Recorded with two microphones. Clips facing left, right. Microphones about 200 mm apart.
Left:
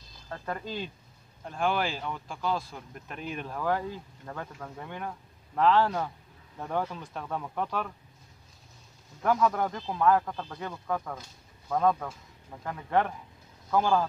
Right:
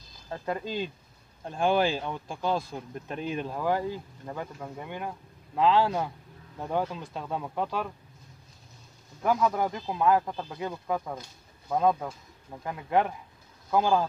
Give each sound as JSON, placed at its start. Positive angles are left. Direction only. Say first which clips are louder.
{"t": 0.3, "sound": "speech", "louder": "right 3 dB", "side_deg": -15}
{"t": 9.2, "sound": "speech", "louder": "even", "side_deg": -5}